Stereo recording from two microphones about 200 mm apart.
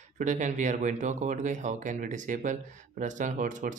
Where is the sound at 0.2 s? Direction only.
40° right (ahead or behind).